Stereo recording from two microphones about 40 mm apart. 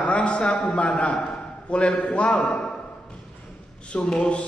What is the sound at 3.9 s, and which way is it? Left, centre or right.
Speech, left.